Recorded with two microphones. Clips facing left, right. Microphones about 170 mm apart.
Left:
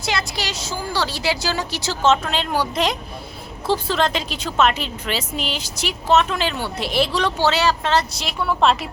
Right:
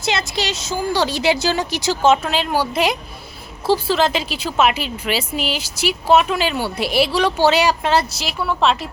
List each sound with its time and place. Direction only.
0.0 s a woman's voice: 25° right (ahead or behind); by 8.9 s centre (ahead or behind)